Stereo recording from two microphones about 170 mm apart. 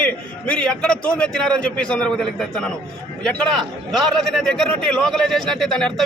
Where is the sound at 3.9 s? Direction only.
Centre (ahead or behind).